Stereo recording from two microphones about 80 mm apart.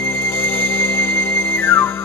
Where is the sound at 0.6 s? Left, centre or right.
Left.